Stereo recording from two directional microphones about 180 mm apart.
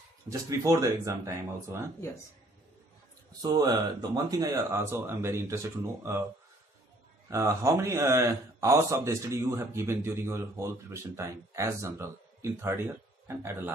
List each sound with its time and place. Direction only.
0.3 s speech: 20° right (ahead or behind)
3.4 s speech: 20° right (ahead or behind)
7.2 s speech: 15° right (ahead or behind)